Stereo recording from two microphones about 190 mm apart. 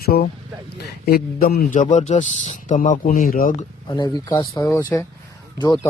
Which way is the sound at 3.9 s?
20° left (ahead or behind).